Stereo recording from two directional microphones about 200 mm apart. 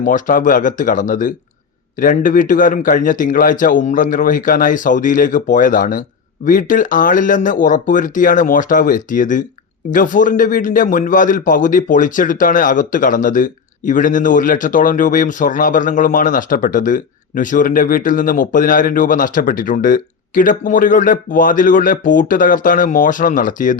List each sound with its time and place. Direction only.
0.0 s a man's voice: 40° left (ahead or behind)